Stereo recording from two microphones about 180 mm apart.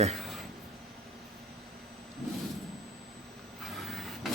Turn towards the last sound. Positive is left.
turn(degrees=0)  # may be behind; listen again after turning